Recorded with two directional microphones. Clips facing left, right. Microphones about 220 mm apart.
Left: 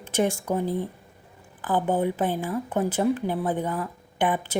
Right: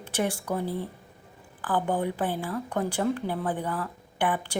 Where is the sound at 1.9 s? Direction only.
20° left (ahead or behind).